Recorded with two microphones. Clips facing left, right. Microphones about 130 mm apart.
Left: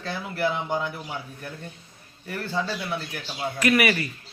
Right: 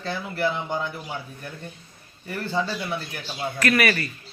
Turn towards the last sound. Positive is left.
turn(degrees=15)  # may be behind; listen again after turning